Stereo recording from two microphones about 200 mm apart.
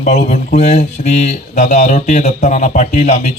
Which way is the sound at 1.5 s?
35° left (ahead or behind).